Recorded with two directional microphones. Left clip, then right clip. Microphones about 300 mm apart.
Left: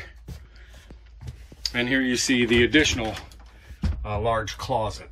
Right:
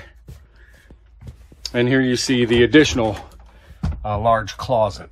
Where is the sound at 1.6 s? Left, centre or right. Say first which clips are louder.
Right 5 dB; centre.